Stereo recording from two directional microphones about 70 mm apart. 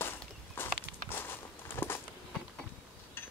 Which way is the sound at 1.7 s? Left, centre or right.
Left.